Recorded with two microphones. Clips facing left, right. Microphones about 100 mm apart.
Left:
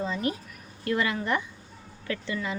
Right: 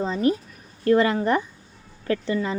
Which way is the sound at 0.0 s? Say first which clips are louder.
Right 7 dB; 30° right (ahead or behind).